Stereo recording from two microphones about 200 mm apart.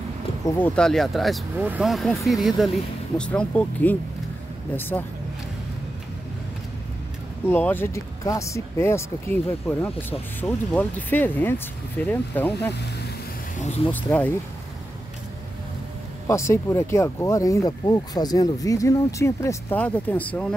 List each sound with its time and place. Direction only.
0.6 s speech: 5° left (ahead or behind)
7.4 s speech: 10° left (ahead or behind)
13.9 s speech: 10° left (ahead or behind)
16.3 s speech: 15° left (ahead or behind)